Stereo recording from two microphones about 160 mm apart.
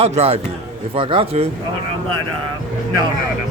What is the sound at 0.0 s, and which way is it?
Speech, 40° right (ahead or behind).